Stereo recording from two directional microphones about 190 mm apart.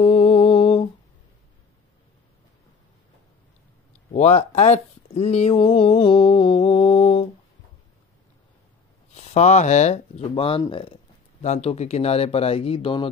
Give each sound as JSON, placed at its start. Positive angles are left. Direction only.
{"t": 0.0, "sound": "mantra", "side_deg": 30}
{"t": 4.1, "sound": "speech", "side_deg": 35}
{"t": 9.1, "sound": "speech", "side_deg": 35}